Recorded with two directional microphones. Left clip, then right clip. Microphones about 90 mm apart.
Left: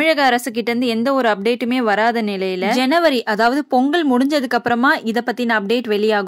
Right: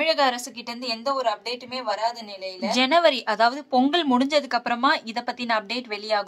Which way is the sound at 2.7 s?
45° left (ahead or behind).